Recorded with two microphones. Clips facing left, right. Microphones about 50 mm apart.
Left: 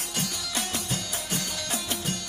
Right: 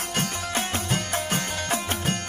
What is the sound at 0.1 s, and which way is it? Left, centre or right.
Music, right.